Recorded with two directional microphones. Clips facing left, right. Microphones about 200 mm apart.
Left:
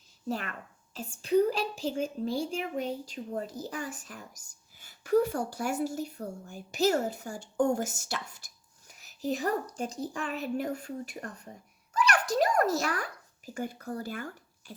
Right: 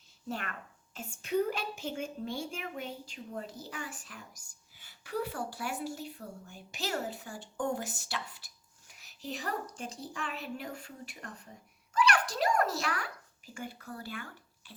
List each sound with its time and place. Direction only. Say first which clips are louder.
0.3 s a woman's voice: left 5 dB; 35° left (ahead or behind)